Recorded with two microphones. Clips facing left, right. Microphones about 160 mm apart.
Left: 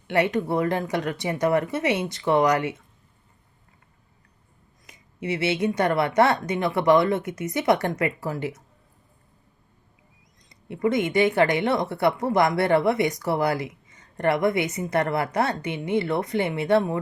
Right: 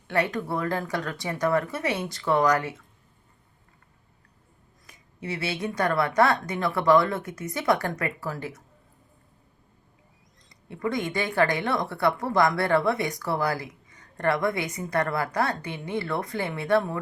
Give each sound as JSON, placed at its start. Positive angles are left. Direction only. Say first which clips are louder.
{"t": 0.1, "sound": "speech", "louder": "left 4 dB", "side_deg": 20}
{"t": 4.9, "sound": "speech", "louder": "left 5 dB", "side_deg": 20}
{"t": 10.5, "sound": "speech", "louder": "left 5 dB", "side_deg": 20}